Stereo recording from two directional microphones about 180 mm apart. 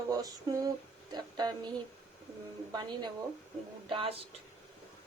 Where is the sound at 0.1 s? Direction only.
20° right (ahead or behind).